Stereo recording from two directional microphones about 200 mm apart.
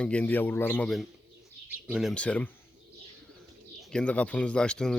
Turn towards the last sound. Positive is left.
turn(degrees=5)  # may be behind; listen again after turning